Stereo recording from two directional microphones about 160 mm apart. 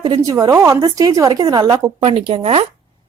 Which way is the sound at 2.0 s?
35° right (ahead or behind).